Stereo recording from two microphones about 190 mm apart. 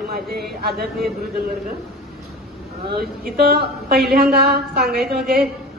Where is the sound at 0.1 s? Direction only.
55° right (ahead or behind).